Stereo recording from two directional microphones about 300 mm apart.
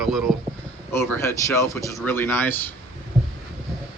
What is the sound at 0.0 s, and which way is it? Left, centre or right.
Speech, centre.